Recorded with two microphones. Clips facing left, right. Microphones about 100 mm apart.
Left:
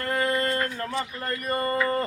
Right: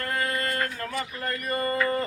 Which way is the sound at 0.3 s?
30° left (ahead or behind).